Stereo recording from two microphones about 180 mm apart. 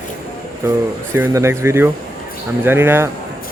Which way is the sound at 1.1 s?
15° right (ahead or behind).